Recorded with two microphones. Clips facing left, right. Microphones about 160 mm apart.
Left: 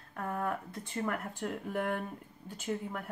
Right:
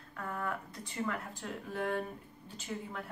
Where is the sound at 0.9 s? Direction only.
55° left (ahead or behind).